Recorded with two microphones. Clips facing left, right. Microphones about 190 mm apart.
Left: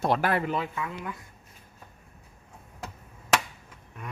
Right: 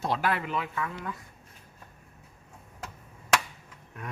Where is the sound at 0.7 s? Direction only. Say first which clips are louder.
Even; 15° left (ahead or behind).